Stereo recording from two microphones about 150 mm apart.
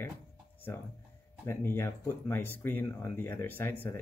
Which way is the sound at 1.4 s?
15° left (ahead or behind).